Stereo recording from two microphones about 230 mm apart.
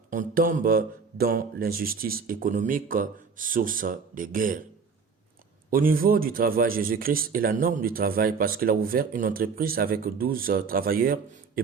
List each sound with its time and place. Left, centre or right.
0.1 s a man's voice: right
5.7 s a man's voice: right